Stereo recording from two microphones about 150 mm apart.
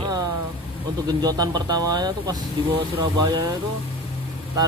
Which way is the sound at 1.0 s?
25° right (ahead or behind).